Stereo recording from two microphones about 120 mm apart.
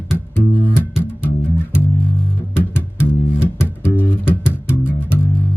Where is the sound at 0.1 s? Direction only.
15° left (ahead or behind).